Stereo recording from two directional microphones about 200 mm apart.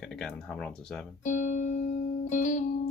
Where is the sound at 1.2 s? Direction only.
40° left (ahead or behind).